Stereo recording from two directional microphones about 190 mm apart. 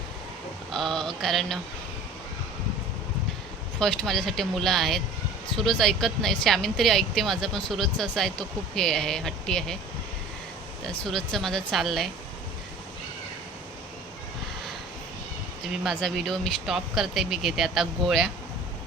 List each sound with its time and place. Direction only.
0.7 s speech: centre (ahead or behind)
3.8 s speech: centre (ahead or behind)
10.8 s speech: 5° left (ahead or behind)
15.8 s speech: centre (ahead or behind)